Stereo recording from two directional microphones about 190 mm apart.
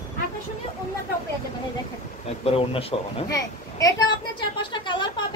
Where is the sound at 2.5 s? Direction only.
30° left (ahead or behind).